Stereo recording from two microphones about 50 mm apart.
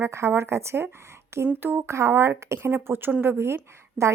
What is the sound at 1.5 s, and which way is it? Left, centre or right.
Speech, right.